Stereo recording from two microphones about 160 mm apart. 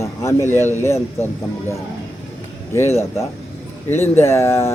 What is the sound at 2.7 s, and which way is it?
Speech, 15° left (ahead or behind).